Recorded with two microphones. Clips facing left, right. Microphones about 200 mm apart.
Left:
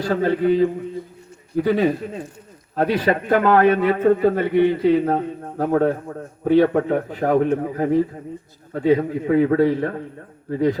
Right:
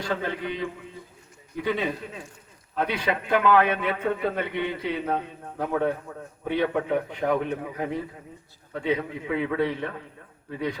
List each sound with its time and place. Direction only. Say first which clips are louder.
0.0 s a man's voice: left 10 dB; 40° left (ahead or behind)